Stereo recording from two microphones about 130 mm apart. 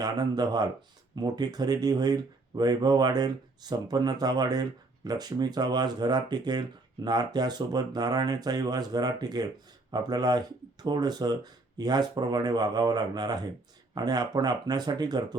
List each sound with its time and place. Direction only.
0.0 s speech: 30° right (ahead or behind)